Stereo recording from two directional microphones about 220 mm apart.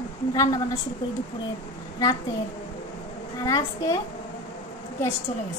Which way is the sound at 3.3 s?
15° left (ahead or behind).